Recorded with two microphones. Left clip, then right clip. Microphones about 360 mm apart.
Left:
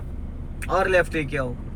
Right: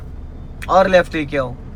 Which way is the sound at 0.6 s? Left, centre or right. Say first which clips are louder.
Right 8 dB; centre.